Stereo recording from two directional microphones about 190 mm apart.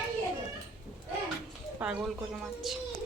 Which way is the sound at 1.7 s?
5° right (ahead or behind).